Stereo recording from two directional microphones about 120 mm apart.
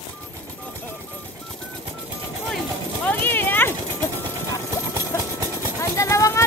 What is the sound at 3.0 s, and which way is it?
Clip-clop, 15° left (ahead or behind).